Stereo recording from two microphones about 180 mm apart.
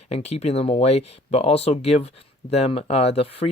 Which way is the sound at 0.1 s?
35° left (ahead or behind).